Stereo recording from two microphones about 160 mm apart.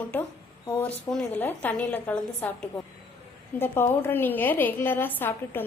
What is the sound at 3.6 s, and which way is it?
A woman's voice, 15° left (ahead or behind).